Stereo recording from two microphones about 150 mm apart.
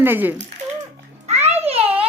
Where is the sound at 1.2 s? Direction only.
45° right (ahead or behind).